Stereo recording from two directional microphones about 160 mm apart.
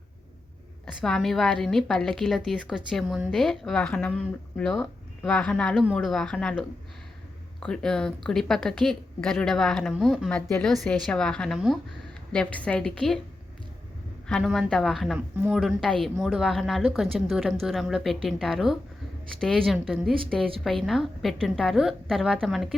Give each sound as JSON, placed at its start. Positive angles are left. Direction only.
{"t": 0.9, "sound": "speech", "side_deg": 5}
{"t": 14.3, "sound": "speech", "side_deg": 0}